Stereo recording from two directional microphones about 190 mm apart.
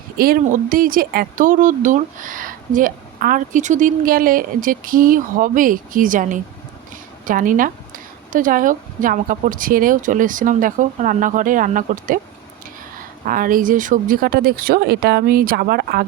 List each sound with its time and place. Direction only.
0.2 s speech: 50° right (ahead or behind)
13.2 s speech: 45° right (ahead or behind)